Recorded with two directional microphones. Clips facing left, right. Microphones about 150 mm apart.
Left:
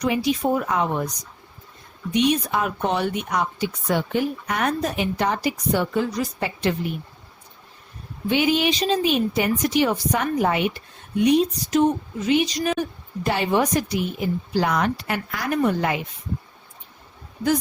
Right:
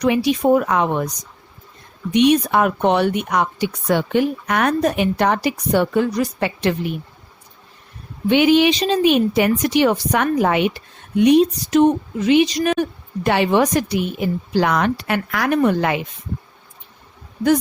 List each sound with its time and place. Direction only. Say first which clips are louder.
0.0 s speech: right 5 dB; 70° right (ahead or behind)
2.1 s speech: right 6 dB; 65° right (ahead or behind)
8.3 s speech: right 7 dB; 70° right (ahead or behind)